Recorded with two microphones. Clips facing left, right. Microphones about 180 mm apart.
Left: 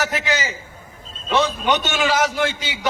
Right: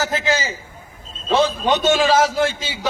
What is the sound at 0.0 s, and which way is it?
A man's voice, 25° right (ahead or behind).